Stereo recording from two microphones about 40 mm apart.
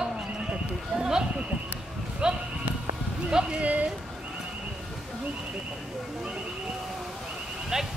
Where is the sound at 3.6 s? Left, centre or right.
Right.